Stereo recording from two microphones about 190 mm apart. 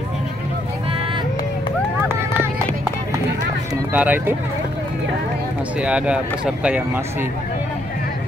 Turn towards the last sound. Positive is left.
turn(degrees=-10)  # may be behind; listen again after turning